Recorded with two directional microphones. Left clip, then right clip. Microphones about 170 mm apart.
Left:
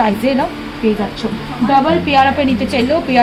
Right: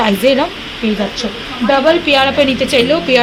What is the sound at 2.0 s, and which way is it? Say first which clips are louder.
Speech: even; 50° right (ahead or behind).